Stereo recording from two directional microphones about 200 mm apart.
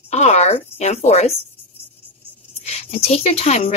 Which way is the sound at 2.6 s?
30° left (ahead or behind).